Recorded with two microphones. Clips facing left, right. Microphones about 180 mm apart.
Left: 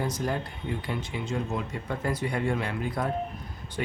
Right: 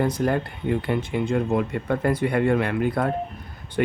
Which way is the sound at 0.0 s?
60° right (ahead or behind).